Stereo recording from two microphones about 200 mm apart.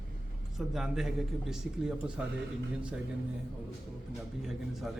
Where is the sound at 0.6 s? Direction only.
Centre (ahead or behind).